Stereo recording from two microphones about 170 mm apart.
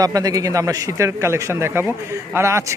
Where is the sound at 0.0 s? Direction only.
20° right (ahead or behind).